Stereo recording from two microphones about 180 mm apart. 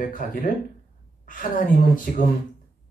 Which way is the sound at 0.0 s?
50° left (ahead or behind).